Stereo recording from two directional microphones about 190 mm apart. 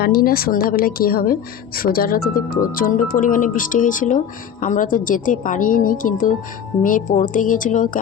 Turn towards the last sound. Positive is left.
turn(degrees=45)  # may be behind; listen again after turning